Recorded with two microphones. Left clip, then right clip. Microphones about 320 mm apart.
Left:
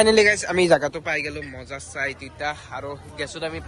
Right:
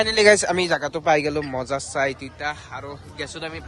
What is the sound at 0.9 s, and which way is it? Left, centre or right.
Speech, centre.